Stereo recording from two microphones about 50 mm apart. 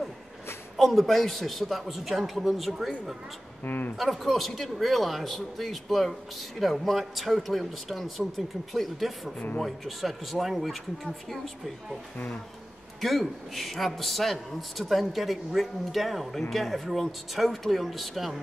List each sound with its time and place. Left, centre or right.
0.7 s a man's voice: centre
3.6 s speech: left
3.9 s a man's voice: centre
13.0 s a man's voice: centre